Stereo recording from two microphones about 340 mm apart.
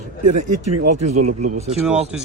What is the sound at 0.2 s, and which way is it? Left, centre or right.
Speech, right.